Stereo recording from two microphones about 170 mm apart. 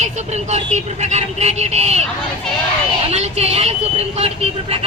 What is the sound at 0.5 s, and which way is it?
Speech, 40° right (ahead or behind).